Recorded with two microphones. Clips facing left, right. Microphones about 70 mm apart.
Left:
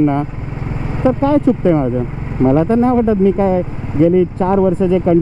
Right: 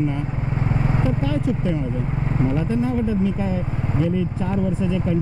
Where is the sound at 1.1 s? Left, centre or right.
Left.